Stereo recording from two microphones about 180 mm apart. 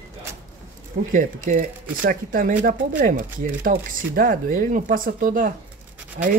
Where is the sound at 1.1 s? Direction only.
45° right (ahead or behind).